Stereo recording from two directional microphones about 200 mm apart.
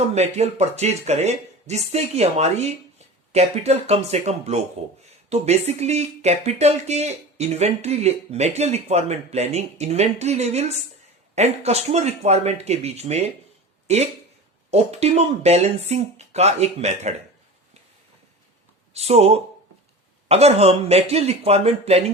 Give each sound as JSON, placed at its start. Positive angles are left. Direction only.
{"t": 0.1, "sound": "speech", "side_deg": -35}
{"t": 18.9, "sound": "speech", "side_deg": -30}